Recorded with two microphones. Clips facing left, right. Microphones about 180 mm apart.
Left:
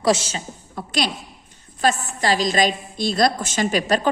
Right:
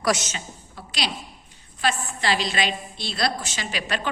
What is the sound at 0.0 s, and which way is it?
Speech, 30° left (ahead or behind).